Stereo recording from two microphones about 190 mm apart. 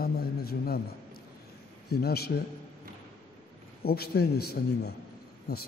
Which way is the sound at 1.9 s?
55° left (ahead or behind).